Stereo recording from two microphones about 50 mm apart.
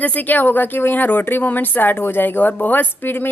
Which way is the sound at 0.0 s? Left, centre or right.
Left.